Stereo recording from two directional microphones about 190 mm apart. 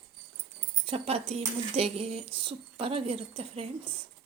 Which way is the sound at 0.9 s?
30° right (ahead or behind).